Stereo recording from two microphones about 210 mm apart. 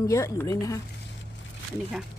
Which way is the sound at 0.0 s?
15° left (ahead or behind).